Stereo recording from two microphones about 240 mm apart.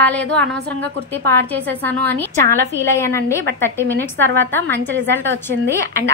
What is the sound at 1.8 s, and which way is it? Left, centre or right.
A woman's voice, centre.